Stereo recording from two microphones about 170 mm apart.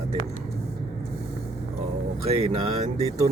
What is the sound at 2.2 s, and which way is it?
Speech, 40° right (ahead or behind).